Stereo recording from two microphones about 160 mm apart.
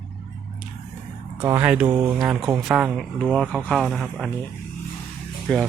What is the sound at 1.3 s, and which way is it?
Speech, 10° right (ahead or behind).